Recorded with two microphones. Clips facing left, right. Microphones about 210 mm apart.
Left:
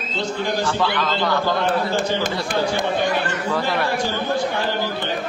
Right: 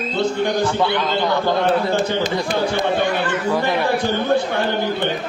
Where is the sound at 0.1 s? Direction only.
60° right (ahead or behind).